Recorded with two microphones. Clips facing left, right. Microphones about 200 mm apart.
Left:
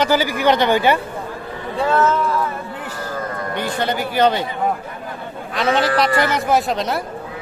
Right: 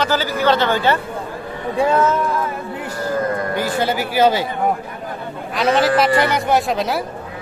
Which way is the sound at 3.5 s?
5° right (ahead or behind).